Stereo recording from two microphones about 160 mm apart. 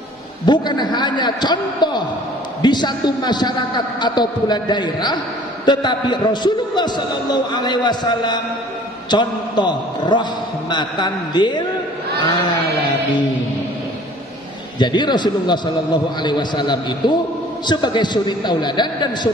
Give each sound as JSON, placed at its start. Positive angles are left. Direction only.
{"t": 0.5, "sound": "a man's voice", "side_deg": 25}
{"t": 14.8, "sound": "a man's voice", "side_deg": 30}